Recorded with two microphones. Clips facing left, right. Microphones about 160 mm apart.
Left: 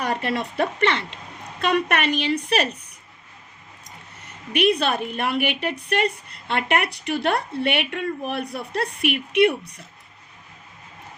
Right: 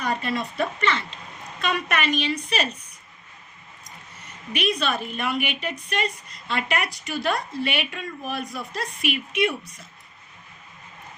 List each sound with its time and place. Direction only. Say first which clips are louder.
0.0 s a woman's voice: left 2 dB; 65° left (ahead or behind)
4.5 s a woman's voice: left 5 dB; 60° left (ahead or behind)